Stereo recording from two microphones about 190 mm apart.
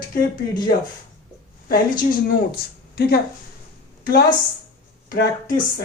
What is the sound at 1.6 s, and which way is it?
Speech, 50° left (ahead or behind).